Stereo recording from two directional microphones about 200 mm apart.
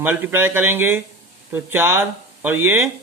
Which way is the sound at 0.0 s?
10° right (ahead or behind).